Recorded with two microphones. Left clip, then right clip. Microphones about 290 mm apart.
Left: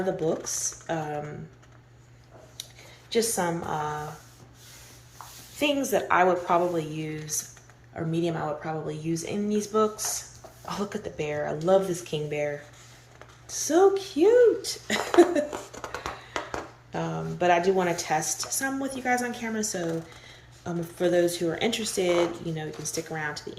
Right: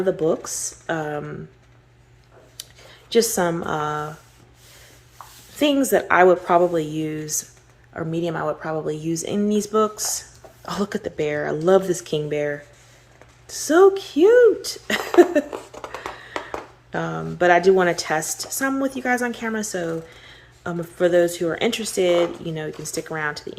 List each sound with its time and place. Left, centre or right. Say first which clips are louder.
0.6 s speech: right 5 dB; centre
2.6 s a sound: right 2 dB; centre
3.1 s speech: right 7 dB; centre
5.9 s speech: right 7 dB; centre
15.4 s a sound: right 3 dB; centre
16.9 s speech: right 5 dB; centre